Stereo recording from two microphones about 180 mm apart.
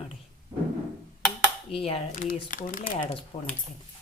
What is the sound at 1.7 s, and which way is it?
Speech, 30° left (ahead or behind).